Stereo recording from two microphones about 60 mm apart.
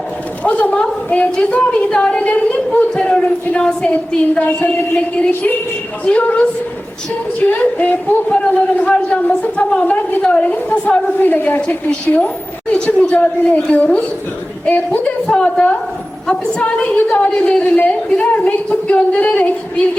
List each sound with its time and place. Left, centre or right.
0.4 s a man's voice: left
6.1 s a man's voice: left
7.5 s a man's voice: left
12.0 s a man's voice: left
15.0 s a woman's voice: centre
16.8 s a woman's voice: left
17.2 s a man's voice: centre